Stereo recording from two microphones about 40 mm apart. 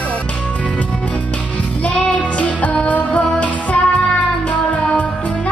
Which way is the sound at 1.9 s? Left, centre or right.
Left.